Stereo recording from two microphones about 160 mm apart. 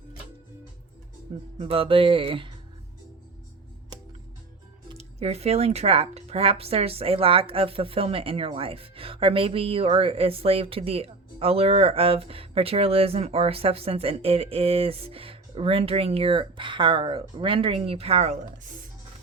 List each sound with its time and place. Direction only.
1.5 s speech: 35° right (ahead or behind)
4.9 s speech: 40° right (ahead or behind)